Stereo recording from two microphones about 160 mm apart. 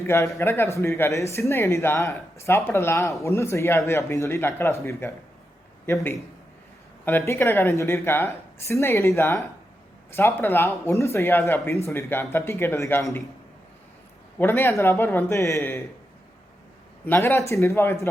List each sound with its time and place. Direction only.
0.1 s speech: 15° left (ahead or behind)
14.3 s speech: 15° left (ahead or behind)
17.1 s speech: 15° left (ahead or behind)